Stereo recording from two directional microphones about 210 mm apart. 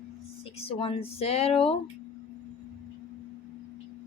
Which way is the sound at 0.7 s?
25° left (ahead or behind).